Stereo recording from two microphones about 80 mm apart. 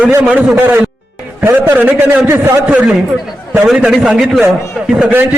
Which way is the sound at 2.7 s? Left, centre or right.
Centre.